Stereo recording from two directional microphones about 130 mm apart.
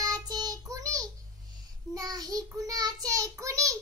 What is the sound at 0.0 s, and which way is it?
Child singing, 30° right (ahead or behind).